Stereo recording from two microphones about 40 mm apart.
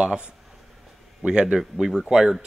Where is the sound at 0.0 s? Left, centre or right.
Right.